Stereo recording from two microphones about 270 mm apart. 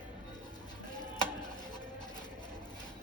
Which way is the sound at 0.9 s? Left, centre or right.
Centre.